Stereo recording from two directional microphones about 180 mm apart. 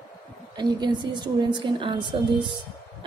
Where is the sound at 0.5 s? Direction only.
25° right (ahead or behind).